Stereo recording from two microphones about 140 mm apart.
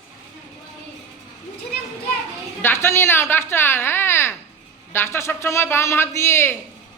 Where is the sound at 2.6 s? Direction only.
15° left (ahead or behind).